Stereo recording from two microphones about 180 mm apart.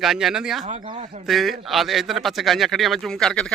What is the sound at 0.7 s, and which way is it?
Speech, 35° right (ahead or behind).